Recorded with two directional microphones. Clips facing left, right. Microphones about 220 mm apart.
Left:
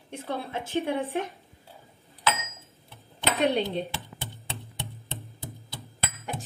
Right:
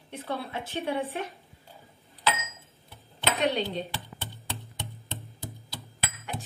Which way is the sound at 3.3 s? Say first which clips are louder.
Left 3 dB; centre (ahead or behind).